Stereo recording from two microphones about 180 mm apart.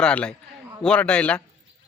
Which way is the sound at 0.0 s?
5° left (ahead or behind).